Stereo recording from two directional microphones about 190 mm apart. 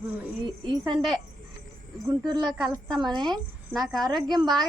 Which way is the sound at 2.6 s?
Centre (ahead or behind).